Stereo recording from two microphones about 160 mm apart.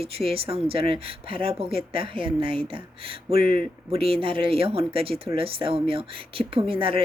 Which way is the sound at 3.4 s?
65° left (ahead or behind).